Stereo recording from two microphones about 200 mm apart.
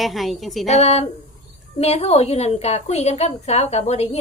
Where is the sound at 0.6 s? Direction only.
35° left (ahead or behind).